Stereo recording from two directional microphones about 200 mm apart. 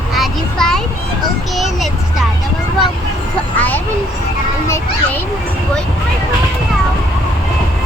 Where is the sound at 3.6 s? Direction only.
10° left (ahead or behind).